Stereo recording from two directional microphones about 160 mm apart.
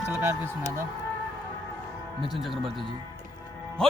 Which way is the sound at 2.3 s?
Centre (ahead or behind).